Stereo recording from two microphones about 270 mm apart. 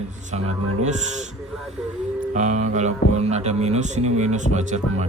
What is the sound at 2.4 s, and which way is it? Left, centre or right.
Speech, right.